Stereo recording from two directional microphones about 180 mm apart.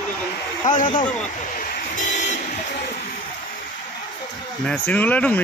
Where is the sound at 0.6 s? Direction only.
45° left (ahead or behind).